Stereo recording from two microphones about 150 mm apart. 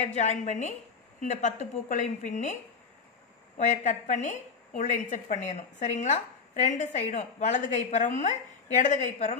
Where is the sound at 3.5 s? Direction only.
55° left (ahead or behind).